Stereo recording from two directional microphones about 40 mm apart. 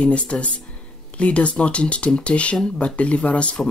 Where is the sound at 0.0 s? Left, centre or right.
Left.